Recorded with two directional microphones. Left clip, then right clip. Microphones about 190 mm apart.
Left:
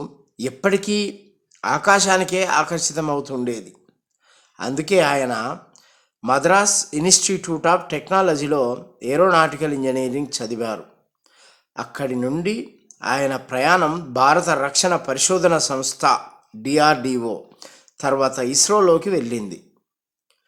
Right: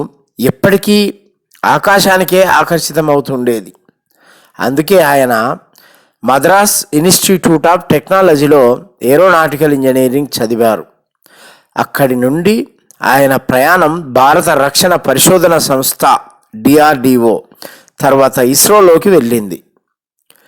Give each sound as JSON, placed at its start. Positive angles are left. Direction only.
{"t": 0.0, "sound": "speech", "side_deg": -45}